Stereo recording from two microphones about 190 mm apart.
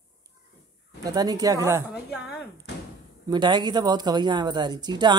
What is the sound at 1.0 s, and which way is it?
Speech, 20° right (ahead or behind).